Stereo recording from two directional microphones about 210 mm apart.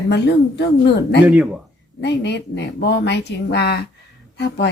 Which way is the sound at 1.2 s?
5° right (ahead or behind).